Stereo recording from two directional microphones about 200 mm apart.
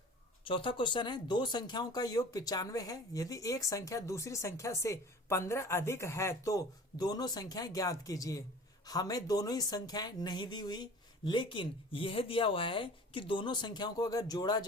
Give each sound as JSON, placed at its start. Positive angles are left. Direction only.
{"t": 0.4, "sound": "speech", "side_deg": 25}